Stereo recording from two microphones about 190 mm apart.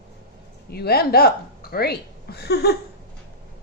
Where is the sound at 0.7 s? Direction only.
55° left (ahead or behind).